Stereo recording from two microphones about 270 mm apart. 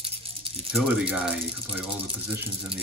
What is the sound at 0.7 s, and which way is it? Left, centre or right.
Speech, centre.